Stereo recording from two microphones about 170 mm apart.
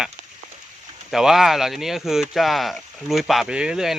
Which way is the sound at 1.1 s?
Centre (ahead or behind).